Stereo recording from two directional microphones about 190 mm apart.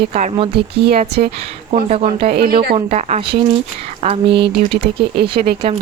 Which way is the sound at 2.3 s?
55° right (ahead or behind).